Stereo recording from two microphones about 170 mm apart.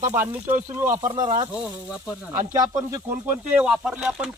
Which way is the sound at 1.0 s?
50° right (ahead or behind).